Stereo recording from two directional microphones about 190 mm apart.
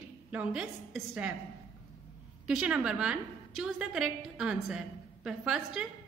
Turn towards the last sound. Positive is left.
turn(degrees=-5)  # may be behind; listen again after turning